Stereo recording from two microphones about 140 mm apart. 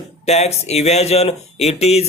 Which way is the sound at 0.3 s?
50° left (ahead or behind).